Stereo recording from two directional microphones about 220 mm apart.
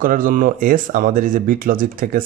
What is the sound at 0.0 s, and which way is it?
Speech, 40° right (ahead or behind).